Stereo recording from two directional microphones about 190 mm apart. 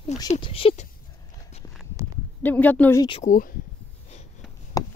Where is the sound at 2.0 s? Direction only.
20° right (ahead or behind).